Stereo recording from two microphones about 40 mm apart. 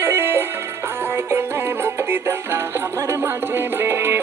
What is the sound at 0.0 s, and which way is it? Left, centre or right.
Music, right.